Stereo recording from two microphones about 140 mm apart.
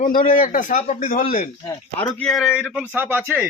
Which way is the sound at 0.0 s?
80° left.